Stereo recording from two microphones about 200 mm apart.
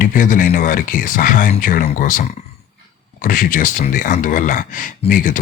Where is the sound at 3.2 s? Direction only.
45° left (ahead or behind).